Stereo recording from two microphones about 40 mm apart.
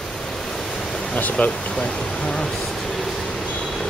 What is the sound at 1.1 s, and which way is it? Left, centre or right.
Speech, left.